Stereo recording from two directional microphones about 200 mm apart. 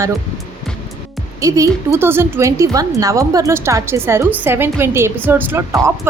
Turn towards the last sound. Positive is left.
turn(degrees=-15)  # may be behind; listen again after turning